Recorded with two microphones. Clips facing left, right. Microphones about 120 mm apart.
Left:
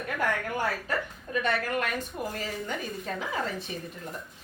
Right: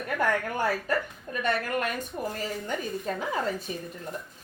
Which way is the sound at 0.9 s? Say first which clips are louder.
Right 3 dB; 45° right (ahead or behind).